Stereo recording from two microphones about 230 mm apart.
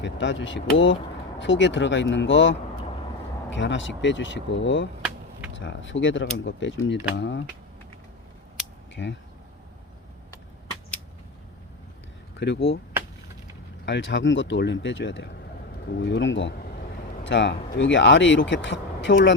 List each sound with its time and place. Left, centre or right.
0.0 s speech: left
9.0 s speech: left
12.4 s speech: left
13.8 s speech: left